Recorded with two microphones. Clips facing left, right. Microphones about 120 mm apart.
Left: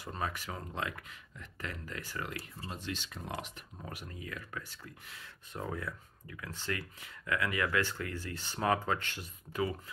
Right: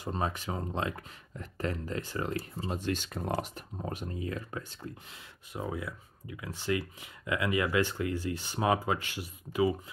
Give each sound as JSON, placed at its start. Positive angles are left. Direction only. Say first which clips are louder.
{"t": 0.0, "sound": "speech", "louder": "right 5 dB", "side_deg": -25}
{"t": 2.7, "sound": "speech", "louder": "right 8 dB", "side_deg": -50}
{"t": 3.3, "sound": "speech", "louder": "right 8 dB", "side_deg": -40}
{"t": 5.5, "sound": "speech", "louder": "right 3 dB", "side_deg": -10}